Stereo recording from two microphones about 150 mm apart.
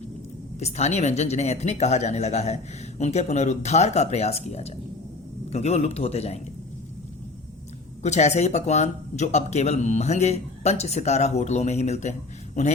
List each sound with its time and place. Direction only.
0.6 s speech: 50° left (ahead or behind)
8.0 s speech: 50° left (ahead or behind)